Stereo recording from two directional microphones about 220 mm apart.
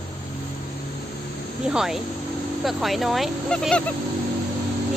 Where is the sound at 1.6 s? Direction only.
Centre (ahead or behind).